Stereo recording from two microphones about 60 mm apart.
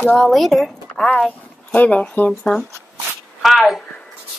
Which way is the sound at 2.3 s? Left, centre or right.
Centre.